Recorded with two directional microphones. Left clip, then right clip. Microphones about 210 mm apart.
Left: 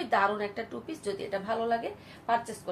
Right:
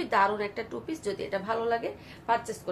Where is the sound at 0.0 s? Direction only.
25° right (ahead or behind).